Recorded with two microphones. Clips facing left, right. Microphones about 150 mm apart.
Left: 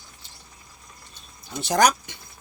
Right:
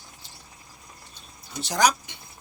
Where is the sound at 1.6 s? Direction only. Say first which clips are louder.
Left 3 dB; 55° left (ahead or behind).